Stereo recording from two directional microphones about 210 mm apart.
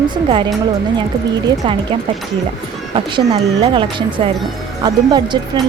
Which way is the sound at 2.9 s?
25° right (ahead or behind).